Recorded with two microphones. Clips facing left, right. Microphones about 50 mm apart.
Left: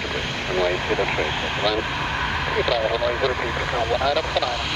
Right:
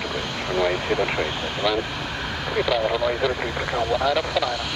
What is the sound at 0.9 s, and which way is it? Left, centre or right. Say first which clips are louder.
Speech: left 1 dB; left.